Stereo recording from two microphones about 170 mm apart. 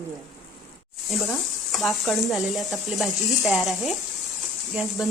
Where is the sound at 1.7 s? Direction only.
Centre (ahead or behind).